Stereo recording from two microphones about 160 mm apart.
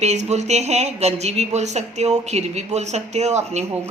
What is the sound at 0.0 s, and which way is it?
Speech, 45° right (ahead or behind).